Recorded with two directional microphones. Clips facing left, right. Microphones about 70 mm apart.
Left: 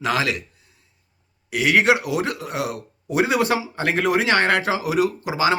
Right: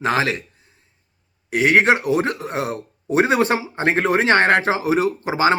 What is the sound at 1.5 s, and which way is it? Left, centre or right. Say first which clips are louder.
Speech: right 2 dB; right.